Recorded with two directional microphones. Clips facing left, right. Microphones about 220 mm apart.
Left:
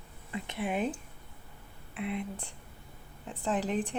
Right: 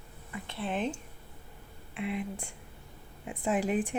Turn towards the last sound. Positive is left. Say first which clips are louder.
# right 2 dB
turn(degrees=-10)  # may be behind; listen again after turning